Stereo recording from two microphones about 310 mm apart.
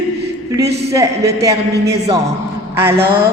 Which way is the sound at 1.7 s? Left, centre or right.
Right.